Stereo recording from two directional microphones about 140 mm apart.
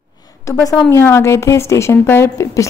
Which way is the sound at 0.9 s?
20° left (ahead or behind).